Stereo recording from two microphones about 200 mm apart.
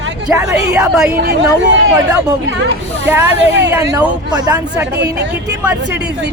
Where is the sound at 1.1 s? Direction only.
55° right (ahead or behind).